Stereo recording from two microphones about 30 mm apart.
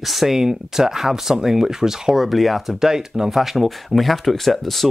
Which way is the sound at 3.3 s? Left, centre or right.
Centre.